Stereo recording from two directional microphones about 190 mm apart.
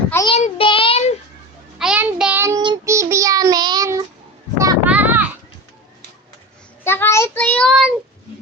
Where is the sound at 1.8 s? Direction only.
5° right (ahead or behind).